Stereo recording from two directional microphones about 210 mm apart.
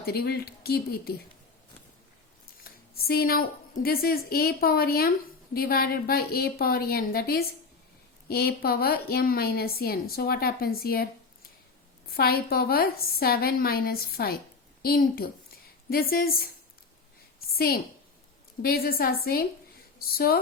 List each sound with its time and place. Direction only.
0.0 s a woman's voice: 45° left (ahead or behind)
2.6 s a sound: 45° left (ahead or behind)
3.8 s a woman's voice: 45° left (ahead or behind)
12.1 s a woman's voice: 45° left (ahead or behind)
18.6 s a woman's voice: 45° left (ahead or behind)